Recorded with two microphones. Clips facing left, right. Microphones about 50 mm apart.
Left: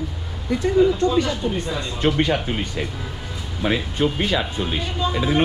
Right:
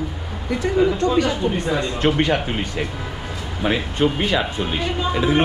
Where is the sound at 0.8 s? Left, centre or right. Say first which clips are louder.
Right 1 dB; right.